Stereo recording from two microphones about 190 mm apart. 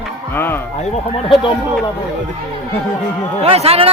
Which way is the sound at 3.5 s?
30° right (ahead or behind).